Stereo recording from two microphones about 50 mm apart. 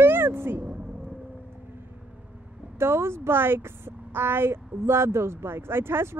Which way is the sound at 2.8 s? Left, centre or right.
Right.